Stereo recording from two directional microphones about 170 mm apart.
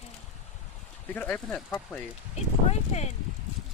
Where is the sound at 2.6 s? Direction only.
40° left (ahead or behind).